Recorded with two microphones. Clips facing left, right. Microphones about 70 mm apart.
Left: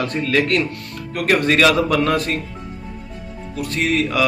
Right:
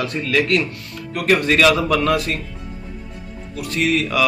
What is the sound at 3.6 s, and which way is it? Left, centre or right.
Speech, left.